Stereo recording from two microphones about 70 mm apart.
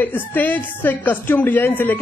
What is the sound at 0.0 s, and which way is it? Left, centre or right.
Speech, left.